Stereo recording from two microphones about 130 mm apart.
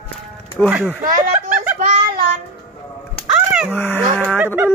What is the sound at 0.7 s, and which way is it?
Speech, 10° right (ahead or behind).